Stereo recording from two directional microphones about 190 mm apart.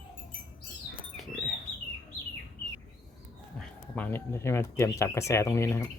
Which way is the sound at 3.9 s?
10° left (ahead or behind).